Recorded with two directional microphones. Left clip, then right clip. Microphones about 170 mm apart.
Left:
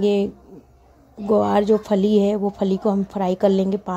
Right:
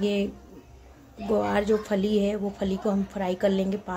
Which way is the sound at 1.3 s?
35° left (ahead or behind).